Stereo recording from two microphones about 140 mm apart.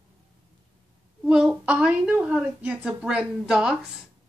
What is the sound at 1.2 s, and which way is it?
A woman's voice, 5° right (ahead or behind).